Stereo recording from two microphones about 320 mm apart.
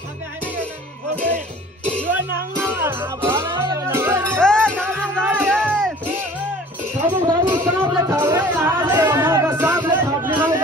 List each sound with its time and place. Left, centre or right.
1.1 s music: centre
7.1 s a sound: centre
10.3 s chatter: centre